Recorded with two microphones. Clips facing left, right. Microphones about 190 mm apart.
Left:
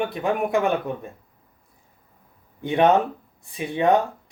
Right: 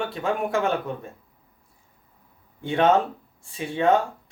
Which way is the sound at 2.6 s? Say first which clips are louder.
Left 2 dB; 15° left (ahead or behind).